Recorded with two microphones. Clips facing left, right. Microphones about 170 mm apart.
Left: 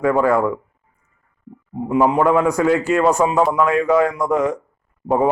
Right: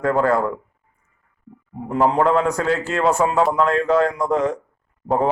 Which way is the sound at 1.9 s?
10° left (ahead or behind).